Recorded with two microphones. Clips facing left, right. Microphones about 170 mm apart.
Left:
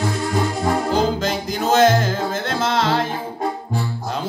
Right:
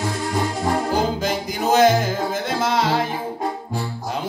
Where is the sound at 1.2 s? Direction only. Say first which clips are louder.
Left 1 dB; 15° right (ahead or behind).